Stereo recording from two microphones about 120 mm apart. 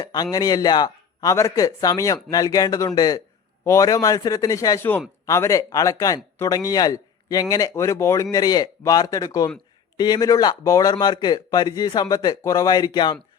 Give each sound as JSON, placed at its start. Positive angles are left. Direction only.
{"t": 0.0, "sound": "a man's voice", "side_deg": 35}